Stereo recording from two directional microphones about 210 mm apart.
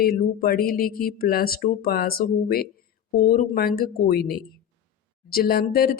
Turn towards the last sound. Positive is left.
turn(degrees=45)  # may be behind; listen again after turning